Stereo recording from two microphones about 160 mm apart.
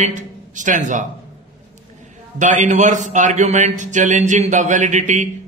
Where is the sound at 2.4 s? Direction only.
50° right (ahead or behind).